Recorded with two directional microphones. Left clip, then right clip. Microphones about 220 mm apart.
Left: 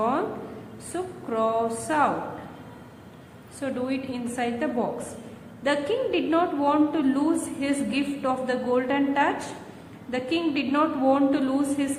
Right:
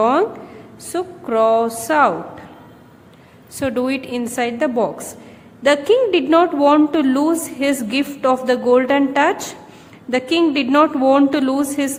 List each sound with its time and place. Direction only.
0.0 s a sound: 50° right (ahead or behind)
0.9 s a woman's voice: 45° right (ahead or behind)
3.6 s a woman's voice: 50° right (ahead or behind)